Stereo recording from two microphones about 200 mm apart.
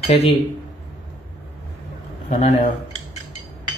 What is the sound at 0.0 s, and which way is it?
Speech, 30° left (ahead or behind).